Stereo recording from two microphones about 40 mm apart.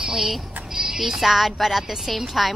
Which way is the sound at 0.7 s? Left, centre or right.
Right.